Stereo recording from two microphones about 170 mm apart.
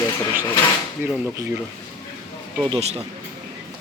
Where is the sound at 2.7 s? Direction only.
35° right (ahead or behind).